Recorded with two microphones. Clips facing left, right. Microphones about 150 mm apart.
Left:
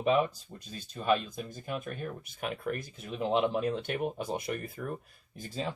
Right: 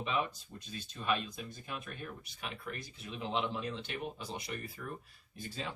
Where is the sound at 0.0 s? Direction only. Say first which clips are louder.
Left 8 dB; 45° left (ahead or behind).